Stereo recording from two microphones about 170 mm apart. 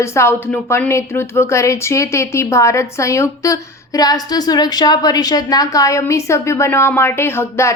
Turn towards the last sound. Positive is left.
turn(degrees=15)  # may be behind; listen again after turning